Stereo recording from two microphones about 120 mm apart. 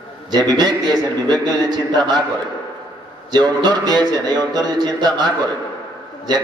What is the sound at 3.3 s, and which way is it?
A man's voice, 35° right (ahead or behind).